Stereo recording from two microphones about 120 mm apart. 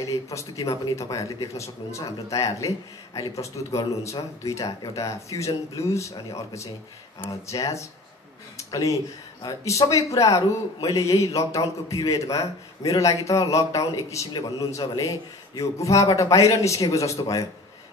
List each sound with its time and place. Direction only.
0.0 s speech: 25° left (ahead or behind)